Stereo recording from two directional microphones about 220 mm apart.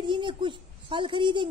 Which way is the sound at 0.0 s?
20° right (ahead or behind).